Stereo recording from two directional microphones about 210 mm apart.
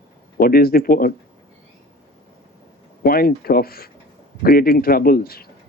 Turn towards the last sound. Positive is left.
turn(degrees=45)  # may be behind; listen again after turning